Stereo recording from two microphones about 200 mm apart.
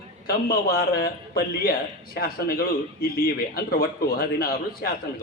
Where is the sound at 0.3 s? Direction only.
50° left (ahead or behind).